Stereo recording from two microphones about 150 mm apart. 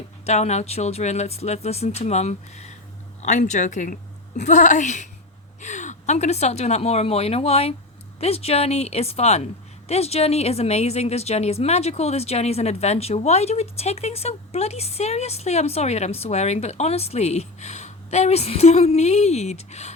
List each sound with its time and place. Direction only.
0.3 s a woman's voice: 50° left (ahead or behind)